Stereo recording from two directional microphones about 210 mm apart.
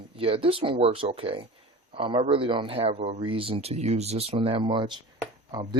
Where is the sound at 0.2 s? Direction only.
25° right (ahead or behind).